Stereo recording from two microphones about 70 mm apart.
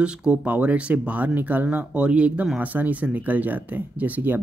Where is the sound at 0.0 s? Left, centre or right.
Centre.